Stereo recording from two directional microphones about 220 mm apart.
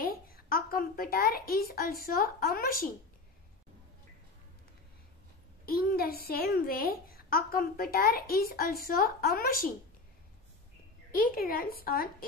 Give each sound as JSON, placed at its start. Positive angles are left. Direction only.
{"t": 0.0, "sound": "a child's voice", "side_deg": 40}
{"t": 5.7, "sound": "a child's voice", "side_deg": 45}
{"t": 11.1, "sound": "a woman's voice", "side_deg": 40}